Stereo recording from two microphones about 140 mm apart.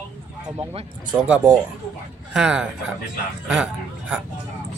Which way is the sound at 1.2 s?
10° right (ahead or behind).